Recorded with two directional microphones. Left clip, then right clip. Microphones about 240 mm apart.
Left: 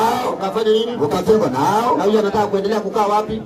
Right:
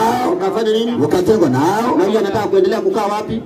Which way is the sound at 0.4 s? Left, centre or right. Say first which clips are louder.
Right 1 dB; right.